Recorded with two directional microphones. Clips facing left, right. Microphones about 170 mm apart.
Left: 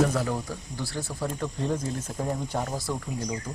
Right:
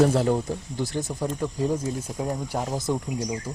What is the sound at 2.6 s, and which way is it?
Speech, 20° right (ahead or behind).